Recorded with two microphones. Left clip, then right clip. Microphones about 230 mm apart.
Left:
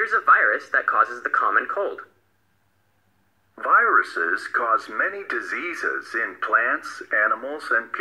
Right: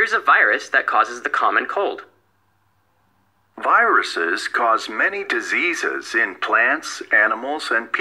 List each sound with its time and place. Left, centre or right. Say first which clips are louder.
0.1 s speech: right 2 dB; right
3.5 s speech: right 2 dB; right